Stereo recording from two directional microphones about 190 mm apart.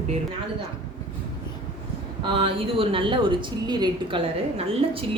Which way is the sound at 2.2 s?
25° right (ahead or behind).